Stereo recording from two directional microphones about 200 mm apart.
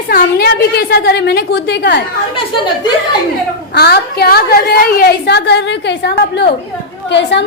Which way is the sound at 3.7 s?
50° left (ahead or behind).